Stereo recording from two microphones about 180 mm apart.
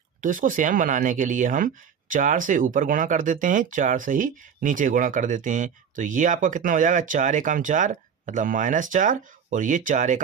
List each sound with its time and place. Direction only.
0.2 s speech: 45° right (ahead or behind)